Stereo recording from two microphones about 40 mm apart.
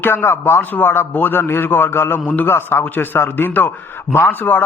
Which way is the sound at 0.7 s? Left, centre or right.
Left.